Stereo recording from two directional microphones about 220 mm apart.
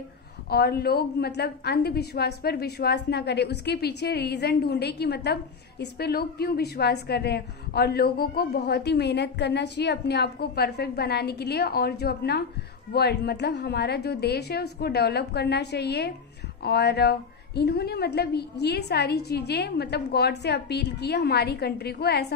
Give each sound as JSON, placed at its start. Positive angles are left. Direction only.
{"t": 0.5, "sound": "a woman's voice", "side_deg": 45}